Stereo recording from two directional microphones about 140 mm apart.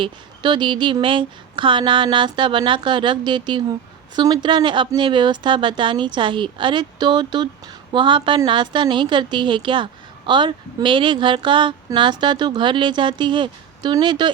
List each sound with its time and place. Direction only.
0.0 s speech: 35° right (ahead or behind)